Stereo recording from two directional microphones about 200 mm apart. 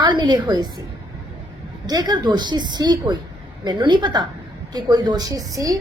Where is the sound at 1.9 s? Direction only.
20° right (ahead or behind).